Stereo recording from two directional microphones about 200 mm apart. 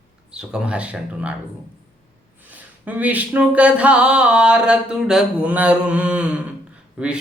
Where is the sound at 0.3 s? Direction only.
5° right (ahead or behind).